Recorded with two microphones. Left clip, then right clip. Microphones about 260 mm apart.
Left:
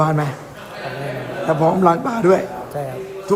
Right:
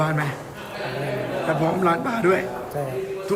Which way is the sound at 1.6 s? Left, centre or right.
Centre.